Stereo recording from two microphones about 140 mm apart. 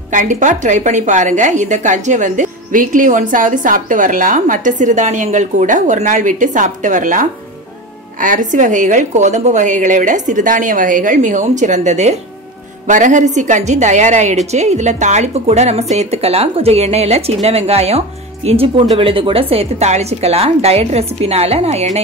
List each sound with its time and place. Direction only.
0.1 s a woman's voice: 65° right (ahead or behind); by 21.8 s 50° right (ahead or behind)